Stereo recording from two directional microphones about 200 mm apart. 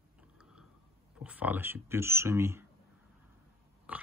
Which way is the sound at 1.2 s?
10° right (ahead or behind).